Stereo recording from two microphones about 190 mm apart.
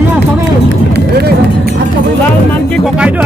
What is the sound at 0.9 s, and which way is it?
Run, 55° right (ahead or behind).